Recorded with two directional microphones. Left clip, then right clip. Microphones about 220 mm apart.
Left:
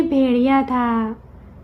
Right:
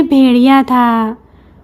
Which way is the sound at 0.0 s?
55° right (ahead or behind).